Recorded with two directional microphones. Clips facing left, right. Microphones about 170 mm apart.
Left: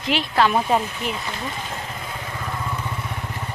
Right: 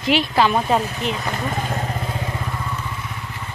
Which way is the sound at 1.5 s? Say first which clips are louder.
Right 7 dB; 50° right (ahead or behind).